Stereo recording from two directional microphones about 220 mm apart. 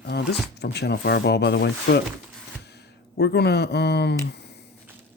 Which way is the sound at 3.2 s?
50° left (ahead or behind).